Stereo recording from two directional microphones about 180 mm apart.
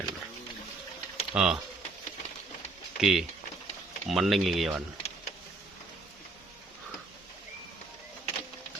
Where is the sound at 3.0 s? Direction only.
Centre (ahead or behind).